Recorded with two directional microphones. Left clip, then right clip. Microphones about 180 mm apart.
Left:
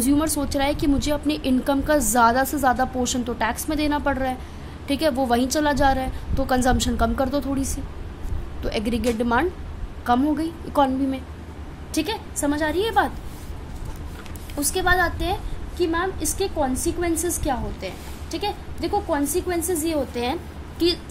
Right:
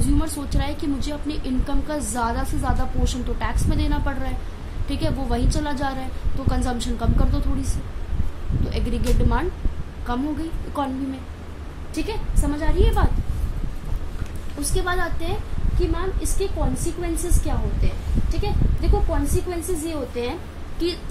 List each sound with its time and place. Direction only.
0.0 s a woman's voice: 50° left (ahead or behind)
11.9 s a woman's voice: 55° left (ahead or behind)
14.6 s a woman's voice: 50° left (ahead or behind)
18.3 s a woman's voice: 55° left (ahead or behind)